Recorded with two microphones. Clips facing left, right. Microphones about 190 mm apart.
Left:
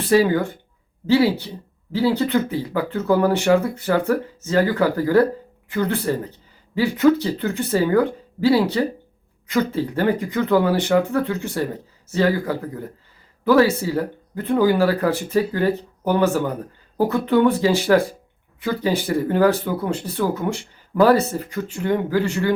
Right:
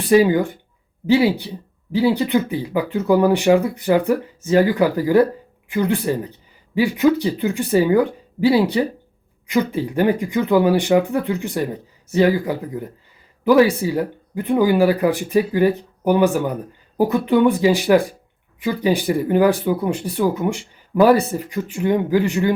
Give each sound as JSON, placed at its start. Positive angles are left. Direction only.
{"t": 0.1, "sound": "speech", "side_deg": -15}